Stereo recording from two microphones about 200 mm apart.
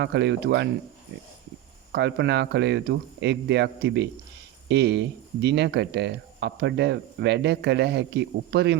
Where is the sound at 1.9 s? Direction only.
60° right (ahead or behind).